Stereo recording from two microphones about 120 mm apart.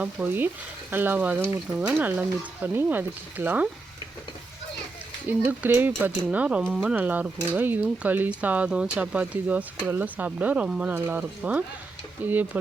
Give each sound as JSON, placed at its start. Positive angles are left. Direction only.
{"t": 0.0, "sound": "speech", "side_deg": -15}
{"t": 5.4, "sound": "speech", "side_deg": -15}
{"t": 6.9, "sound": "speech", "side_deg": -15}